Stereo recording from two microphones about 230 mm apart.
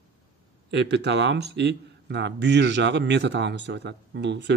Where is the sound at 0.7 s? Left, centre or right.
Right.